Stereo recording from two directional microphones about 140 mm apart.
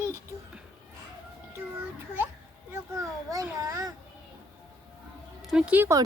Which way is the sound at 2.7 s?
25° right (ahead or behind).